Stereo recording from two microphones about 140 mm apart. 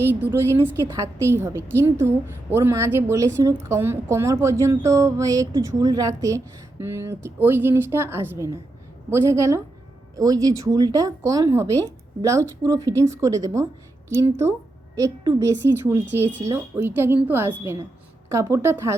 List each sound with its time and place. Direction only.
0.0 s a woman's voice: 15° right (ahead or behind)